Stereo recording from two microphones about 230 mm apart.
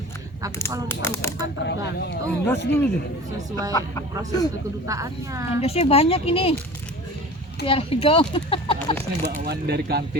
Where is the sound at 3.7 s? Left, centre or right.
Centre.